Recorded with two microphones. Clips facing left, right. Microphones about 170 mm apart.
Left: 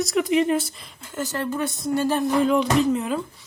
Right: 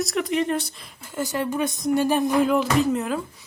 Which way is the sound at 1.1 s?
15° right (ahead or behind).